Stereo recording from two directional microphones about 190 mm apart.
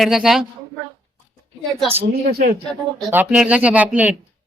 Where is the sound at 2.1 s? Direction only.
55° right (ahead or behind).